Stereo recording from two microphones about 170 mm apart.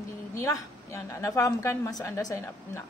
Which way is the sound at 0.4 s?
20° left (ahead or behind).